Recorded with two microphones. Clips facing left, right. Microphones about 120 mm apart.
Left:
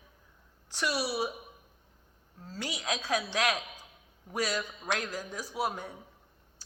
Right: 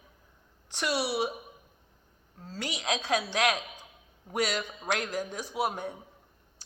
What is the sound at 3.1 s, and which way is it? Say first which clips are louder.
Speech: right 2 dB; 60° right (ahead or behind).